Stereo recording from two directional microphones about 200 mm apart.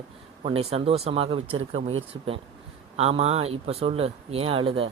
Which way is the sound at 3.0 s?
30° right (ahead or behind).